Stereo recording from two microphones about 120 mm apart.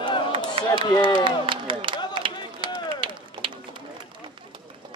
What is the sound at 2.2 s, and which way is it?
Run, 45° right (ahead or behind).